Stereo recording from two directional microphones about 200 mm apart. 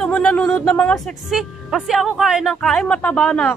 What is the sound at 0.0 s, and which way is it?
Speech, 5° left (ahead or behind).